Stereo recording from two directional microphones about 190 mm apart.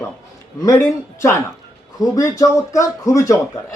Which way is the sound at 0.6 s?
15° left (ahead or behind).